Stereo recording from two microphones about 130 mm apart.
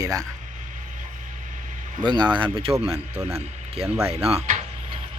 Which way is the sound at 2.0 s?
35° right (ahead or behind).